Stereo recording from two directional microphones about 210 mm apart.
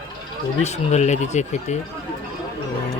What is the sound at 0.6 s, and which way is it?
Speech, 30° left (ahead or behind).